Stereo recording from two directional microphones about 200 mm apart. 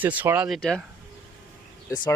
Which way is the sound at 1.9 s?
15° left (ahead or behind).